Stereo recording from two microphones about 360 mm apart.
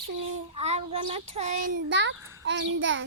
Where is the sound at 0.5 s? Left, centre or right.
Centre.